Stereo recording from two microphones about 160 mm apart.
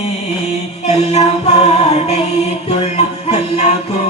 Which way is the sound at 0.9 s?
40° left (ahead or behind).